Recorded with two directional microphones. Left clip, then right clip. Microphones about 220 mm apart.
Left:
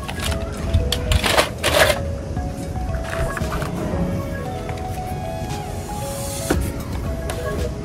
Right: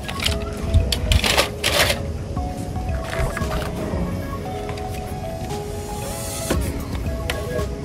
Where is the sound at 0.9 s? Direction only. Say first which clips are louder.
Even; 20° left (ahead or behind).